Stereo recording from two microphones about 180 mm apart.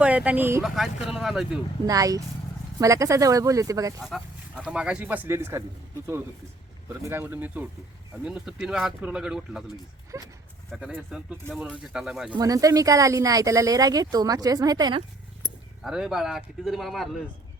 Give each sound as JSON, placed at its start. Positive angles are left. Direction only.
{"t": 0.0, "sound": "speech", "side_deg": -5}
{"t": 1.0, "sound": "speech", "side_deg": 0}
{"t": 1.9, "sound": "speech", "side_deg": -20}
{"t": 4.0, "sound": "speech", "side_deg": -5}
{"t": 7.0, "sound": "speech", "side_deg": -15}
{"t": 10.1, "sound": "speech", "side_deg": -15}
{"t": 10.7, "sound": "speech", "side_deg": -5}
{"t": 12.4, "sound": "speech", "side_deg": -20}
{"t": 15.8, "sound": "speech", "side_deg": 0}